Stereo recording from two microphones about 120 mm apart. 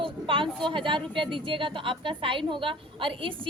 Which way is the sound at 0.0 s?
45° right (ahead or behind).